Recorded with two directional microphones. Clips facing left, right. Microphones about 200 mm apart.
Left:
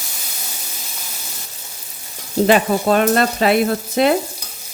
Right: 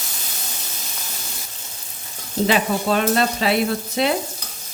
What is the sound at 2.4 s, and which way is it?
Frying, 50° left (ahead or behind).